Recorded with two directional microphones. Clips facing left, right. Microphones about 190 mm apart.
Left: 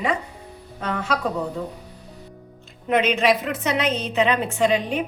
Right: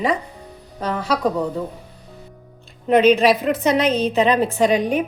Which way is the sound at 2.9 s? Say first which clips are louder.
Right 6 dB; 35° right (ahead or behind).